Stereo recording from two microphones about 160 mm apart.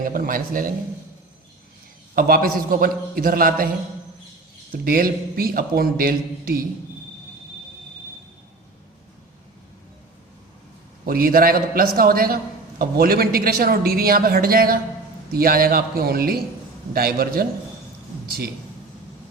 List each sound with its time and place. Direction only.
0.0 s a man's voice: 60° right (ahead or behind)
2.1 s a man's voice: 65° right (ahead or behind)
4.7 s a man's voice: 70° right (ahead or behind)
11.0 s a man's voice: 70° right (ahead or behind)